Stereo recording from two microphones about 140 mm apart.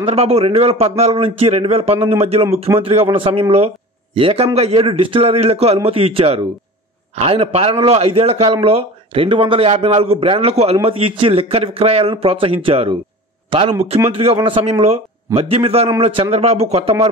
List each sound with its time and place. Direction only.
0.0 s a man's voice: 45° right (ahead or behind)